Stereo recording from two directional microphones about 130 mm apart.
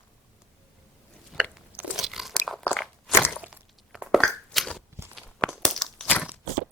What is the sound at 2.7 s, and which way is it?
Biting, centre (ahead or behind).